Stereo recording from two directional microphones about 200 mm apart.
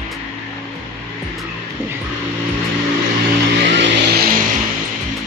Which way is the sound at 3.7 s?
50° right (ahead or behind).